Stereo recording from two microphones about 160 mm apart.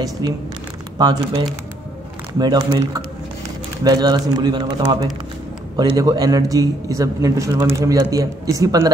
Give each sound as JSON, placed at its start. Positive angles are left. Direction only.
{"t": 0.2, "sound": "a man's voice", "side_deg": -25}
{"t": 3.8, "sound": "a man's voice", "side_deg": -25}